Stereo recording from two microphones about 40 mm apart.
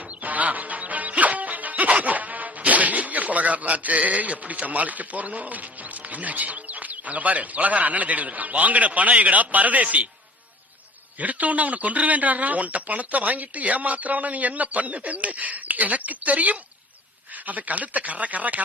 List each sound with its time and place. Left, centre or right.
0.2 s music: right
1.9 s speech: right
11.2 s speech: right